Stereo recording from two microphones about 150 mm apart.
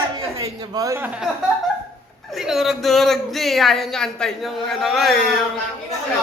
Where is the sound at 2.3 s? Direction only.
Centre (ahead or behind).